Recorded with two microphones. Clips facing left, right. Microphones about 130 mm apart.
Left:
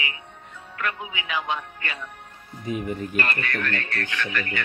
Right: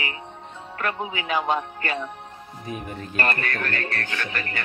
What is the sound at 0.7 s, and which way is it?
Speech, 40° right (ahead or behind).